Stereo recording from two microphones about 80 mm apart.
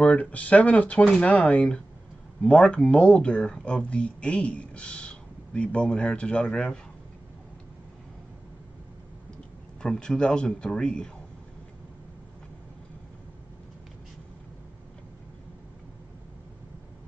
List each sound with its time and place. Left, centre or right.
0.0 s speech: centre
9.8 s speech: centre